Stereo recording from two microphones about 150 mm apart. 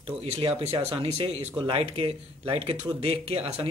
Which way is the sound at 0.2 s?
40° right (ahead or behind).